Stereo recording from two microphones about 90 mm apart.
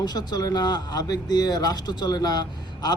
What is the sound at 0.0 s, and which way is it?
Speech, 50° left (ahead or behind).